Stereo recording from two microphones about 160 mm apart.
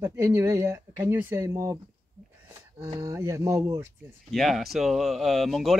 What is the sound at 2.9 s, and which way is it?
Speech, 20° right (ahead or behind).